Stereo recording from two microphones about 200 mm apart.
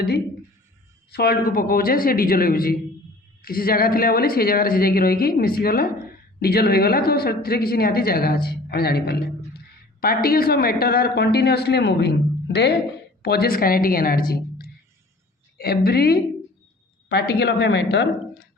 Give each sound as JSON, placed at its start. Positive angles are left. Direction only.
{"t": 1.1, "sound": "speech", "side_deg": 50}
{"t": 13.2, "sound": "speech", "side_deg": 50}